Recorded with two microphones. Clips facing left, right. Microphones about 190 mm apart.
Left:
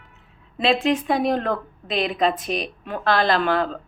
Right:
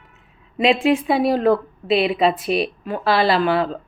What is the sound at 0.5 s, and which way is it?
Speech, 15° right (ahead or behind).